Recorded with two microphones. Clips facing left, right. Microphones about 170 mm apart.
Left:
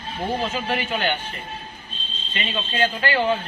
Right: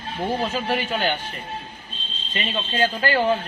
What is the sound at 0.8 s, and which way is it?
Speech, 40° right (ahead or behind).